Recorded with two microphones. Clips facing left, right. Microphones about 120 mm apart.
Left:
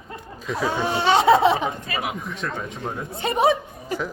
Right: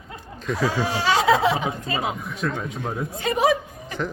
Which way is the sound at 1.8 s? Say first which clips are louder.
Right 2 dB; 25° right (ahead or behind).